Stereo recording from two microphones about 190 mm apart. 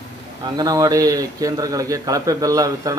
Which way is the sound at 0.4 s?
20° right (ahead or behind).